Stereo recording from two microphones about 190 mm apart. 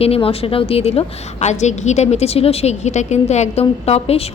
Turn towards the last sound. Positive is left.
turn(degrees=30)  # may be behind; listen again after turning